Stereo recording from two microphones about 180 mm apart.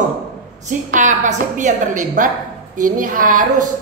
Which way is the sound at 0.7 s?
45° right (ahead or behind).